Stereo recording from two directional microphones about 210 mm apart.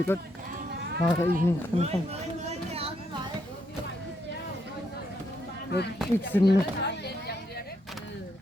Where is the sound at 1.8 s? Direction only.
30° right (ahead or behind).